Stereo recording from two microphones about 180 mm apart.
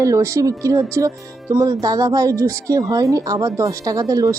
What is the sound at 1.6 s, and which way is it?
Speech, 20° right (ahead or behind).